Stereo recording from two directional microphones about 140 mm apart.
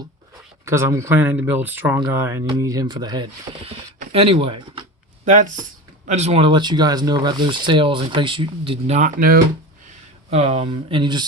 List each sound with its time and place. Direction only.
0.6 s speech: 20° right (ahead or behind)
4.1 s speech: 40° right (ahead or behind)
5.2 s speech: 65° right (ahead or behind)
6.1 s speech: 50° right (ahead or behind)
9.0 s speech: 80° right
10.3 s speech: 45° right (ahead or behind)